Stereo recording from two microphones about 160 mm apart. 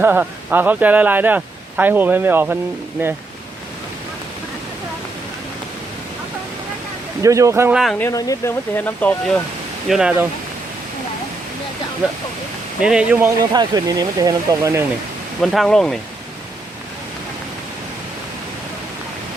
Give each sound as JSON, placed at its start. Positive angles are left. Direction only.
{"t": 0.0, "sound": "speech", "side_deg": -10}
{"t": 7.2, "sound": "speech", "side_deg": -20}
{"t": 7.7, "sound": "speech", "side_deg": 0}
{"t": 7.9, "sound": "speech", "side_deg": 20}
{"t": 9.9, "sound": "speech", "side_deg": -5}
{"t": 12.8, "sound": "speech", "side_deg": -5}
{"t": 13.5, "sound": "speech", "side_deg": -25}
{"t": 15.4, "sound": "speech", "side_deg": 0}